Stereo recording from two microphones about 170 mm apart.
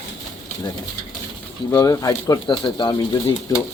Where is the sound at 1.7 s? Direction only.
20° left (ahead or behind).